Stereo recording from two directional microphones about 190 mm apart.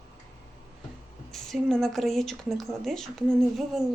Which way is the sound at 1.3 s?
Centre (ahead or behind).